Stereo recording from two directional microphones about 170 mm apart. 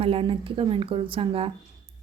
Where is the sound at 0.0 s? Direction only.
35° right (ahead or behind).